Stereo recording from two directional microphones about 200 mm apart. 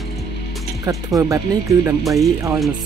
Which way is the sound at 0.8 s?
15° right (ahead or behind).